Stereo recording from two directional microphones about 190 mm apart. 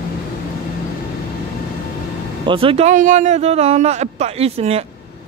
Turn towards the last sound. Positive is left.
turn(degrees=-30)  # may be behind; listen again after turning